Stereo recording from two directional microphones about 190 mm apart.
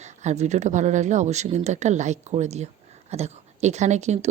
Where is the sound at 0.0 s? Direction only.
35° right (ahead or behind).